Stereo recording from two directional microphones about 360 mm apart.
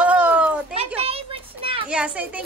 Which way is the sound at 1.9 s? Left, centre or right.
Centre.